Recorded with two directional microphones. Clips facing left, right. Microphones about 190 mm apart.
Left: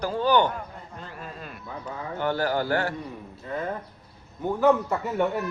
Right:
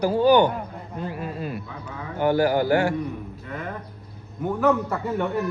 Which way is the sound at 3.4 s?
30° left (ahead or behind).